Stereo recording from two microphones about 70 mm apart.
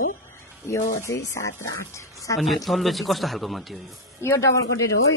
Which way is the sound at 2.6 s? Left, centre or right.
Centre.